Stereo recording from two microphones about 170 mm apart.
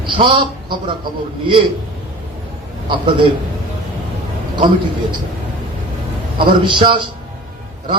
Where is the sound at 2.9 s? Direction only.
30° right (ahead or behind).